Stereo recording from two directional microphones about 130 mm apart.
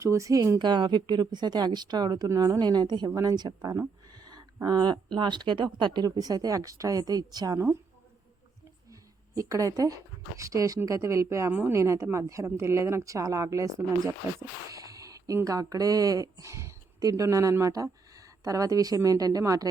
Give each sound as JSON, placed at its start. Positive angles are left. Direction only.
{"t": 0.0, "sound": "speech", "side_deg": -25}
{"t": 0.6, "sound": "a woman's voice", "side_deg": -35}
{"t": 8.9, "sound": "a sound", "side_deg": -25}
{"t": 10.3, "sound": "speech", "side_deg": -25}